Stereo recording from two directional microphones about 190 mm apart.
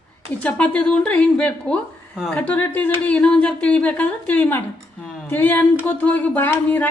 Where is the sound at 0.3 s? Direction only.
5° left (ahead or behind).